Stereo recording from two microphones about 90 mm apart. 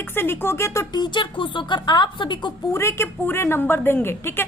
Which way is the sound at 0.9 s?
55° left (ahead or behind).